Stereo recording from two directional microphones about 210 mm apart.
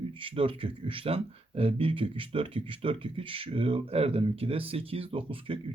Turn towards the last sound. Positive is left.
turn(degrees=-25)  # may be behind; listen again after turning